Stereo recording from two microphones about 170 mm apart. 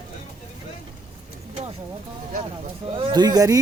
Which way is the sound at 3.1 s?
25° right (ahead or behind).